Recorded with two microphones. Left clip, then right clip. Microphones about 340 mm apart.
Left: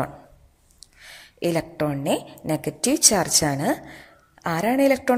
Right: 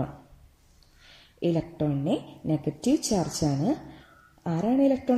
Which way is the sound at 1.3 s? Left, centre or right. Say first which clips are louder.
Left 4 dB; left.